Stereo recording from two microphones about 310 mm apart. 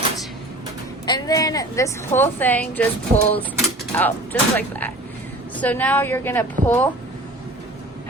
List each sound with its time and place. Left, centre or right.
1.0 s a woman's voice: centre
3.2 s mechanisms: centre
3.9 s a woman's voice: centre